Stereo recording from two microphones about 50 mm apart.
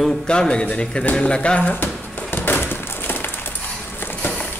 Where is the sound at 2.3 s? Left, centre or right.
Left.